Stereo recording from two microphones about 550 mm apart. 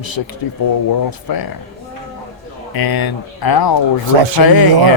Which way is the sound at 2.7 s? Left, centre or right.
Left.